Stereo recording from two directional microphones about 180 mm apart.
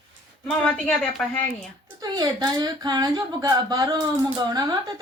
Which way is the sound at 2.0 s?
25° right (ahead or behind).